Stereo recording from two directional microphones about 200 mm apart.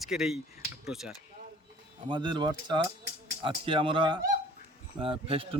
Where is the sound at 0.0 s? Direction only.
Centre (ahead or behind).